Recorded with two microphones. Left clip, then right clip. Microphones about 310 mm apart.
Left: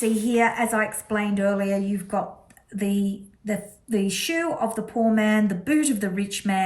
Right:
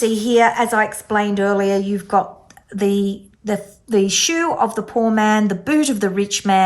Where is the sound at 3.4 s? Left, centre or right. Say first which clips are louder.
Right 7 dB; centre.